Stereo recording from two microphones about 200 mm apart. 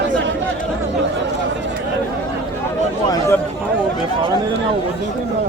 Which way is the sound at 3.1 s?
15° left (ahead or behind).